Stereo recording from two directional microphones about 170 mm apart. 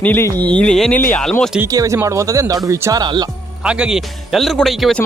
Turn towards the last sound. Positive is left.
turn(degrees=0)  # may be behind; listen again after turning